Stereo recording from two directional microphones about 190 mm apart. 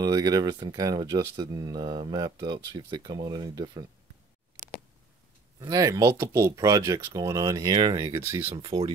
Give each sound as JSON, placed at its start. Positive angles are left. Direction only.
{"t": 0.0, "sound": "speech", "side_deg": -20}
{"t": 5.6, "sound": "speech", "side_deg": -20}